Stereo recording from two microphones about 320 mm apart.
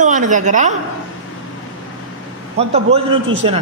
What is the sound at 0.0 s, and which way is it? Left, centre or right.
Speech, right.